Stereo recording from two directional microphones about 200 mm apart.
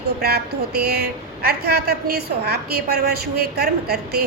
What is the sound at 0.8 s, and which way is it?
A woman's voice, 55° right (ahead or behind).